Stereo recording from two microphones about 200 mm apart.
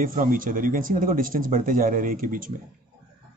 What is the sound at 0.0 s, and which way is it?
Speech, 45° right (ahead or behind).